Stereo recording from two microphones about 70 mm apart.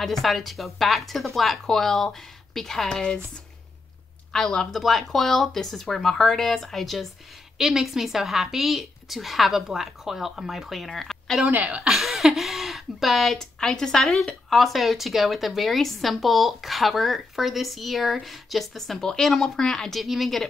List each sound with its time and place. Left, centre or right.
0.0 s speech: centre
4.3 s speech: centre
11.4 s speech: right
11.8 s speech: centre